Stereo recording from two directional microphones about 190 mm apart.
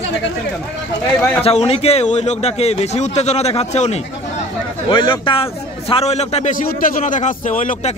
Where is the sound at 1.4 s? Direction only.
30° left (ahead or behind).